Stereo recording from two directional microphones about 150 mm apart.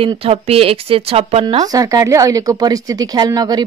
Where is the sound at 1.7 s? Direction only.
25° right (ahead or behind).